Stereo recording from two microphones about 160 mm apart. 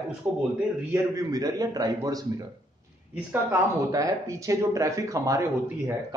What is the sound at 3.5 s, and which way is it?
Speech, 20° right (ahead or behind).